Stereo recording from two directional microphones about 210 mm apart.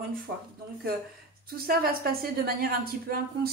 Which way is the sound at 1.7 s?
45° right (ahead or behind).